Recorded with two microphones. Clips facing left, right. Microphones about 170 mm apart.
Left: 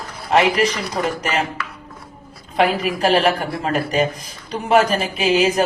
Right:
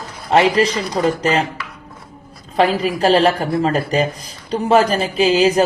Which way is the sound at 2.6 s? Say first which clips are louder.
Right 2 dB; 35° right (ahead or behind).